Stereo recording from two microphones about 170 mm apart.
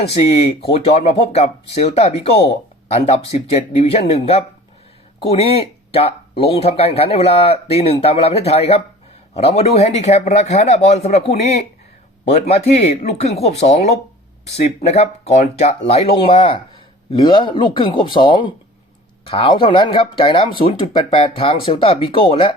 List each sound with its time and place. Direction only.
0.2 s speech: 40° left (ahead or behind)
3.3 s speech: 40° left (ahead or behind)